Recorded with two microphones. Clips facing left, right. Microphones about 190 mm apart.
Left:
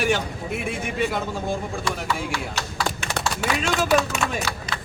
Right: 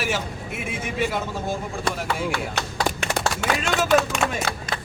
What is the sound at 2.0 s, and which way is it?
Speech, 55° right (ahead or behind).